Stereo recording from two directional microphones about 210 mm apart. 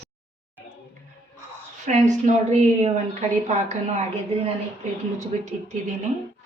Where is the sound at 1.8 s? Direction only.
35° right (ahead or behind).